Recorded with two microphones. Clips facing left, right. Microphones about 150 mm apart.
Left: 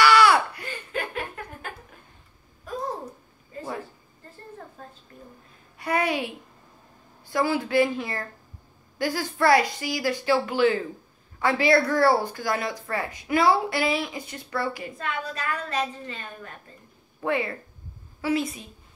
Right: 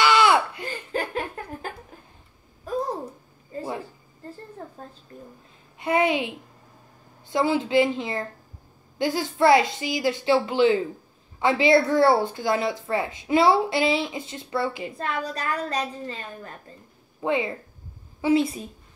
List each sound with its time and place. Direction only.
0.0 s a sound: 20° right (ahead or behind)
0.7 s laughter: 35° right (ahead or behind)
5.8 s a woman's voice: 20° right (ahead or behind)
15.0 s a woman's voice: 35° right (ahead or behind)
17.2 s a woman's voice: 20° right (ahead or behind)